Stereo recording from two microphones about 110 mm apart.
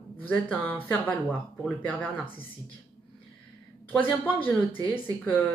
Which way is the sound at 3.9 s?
15° left (ahead or behind).